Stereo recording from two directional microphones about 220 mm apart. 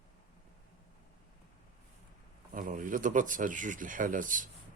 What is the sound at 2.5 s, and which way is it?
Speech, 35° right (ahead or behind).